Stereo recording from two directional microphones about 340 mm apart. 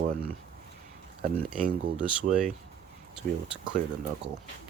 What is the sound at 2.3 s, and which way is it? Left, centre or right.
Speech, right.